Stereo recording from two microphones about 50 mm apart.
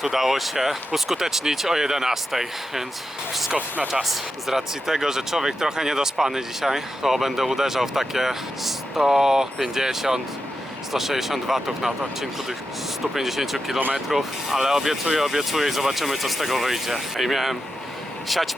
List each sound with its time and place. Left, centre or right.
0.0 s speech: centre
4.0 s speech: centre